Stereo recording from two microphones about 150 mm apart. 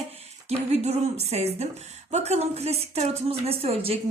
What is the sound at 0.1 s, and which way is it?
Speech, 45° right (ahead or behind).